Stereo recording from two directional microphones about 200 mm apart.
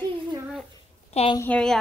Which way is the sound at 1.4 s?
5° left (ahead or behind).